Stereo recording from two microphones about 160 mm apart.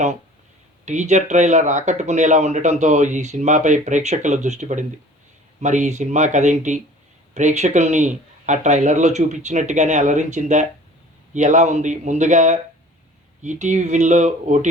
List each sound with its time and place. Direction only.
0.9 s speech: 45° right (ahead or behind)